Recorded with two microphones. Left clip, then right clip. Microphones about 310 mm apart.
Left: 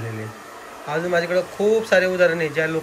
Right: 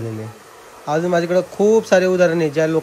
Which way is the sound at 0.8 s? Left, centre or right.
Right.